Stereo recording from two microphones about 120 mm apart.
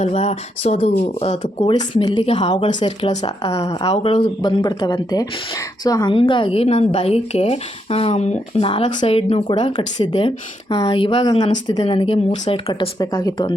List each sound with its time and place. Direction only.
0.0 s speech: 65° left (ahead or behind)
2.0 s speech: 45° left (ahead or behind)
3.1 s speech: 65° left (ahead or behind); by 4.5 s 50° left (ahead or behind)
4.6 s a woman's voice: 35° left (ahead or behind)
6.1 s speech: 45° left (ahead or behind); by 8.6 s 65° left (ahead or behind)
8.6 s speech: 45° left (ahead or behind)
9.0 s speech: 55° left (ahead or behind)